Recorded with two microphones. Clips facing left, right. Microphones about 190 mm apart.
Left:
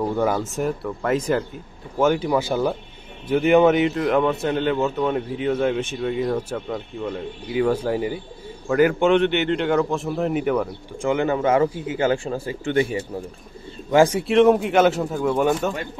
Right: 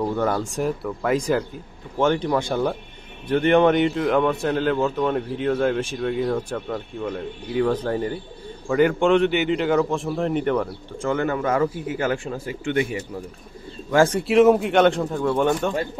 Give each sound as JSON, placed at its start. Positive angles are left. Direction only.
{"t": 0.1, "sound": "a man's voice", "side_deg": 5}
{"t": 11.0, "sound": "speech", "side_deg": 15}
{"t": 13.8, "sound": "speech", "side_deg": 15}
{"t": 14.2, "sound": "a man's voice", "side_deg": 0}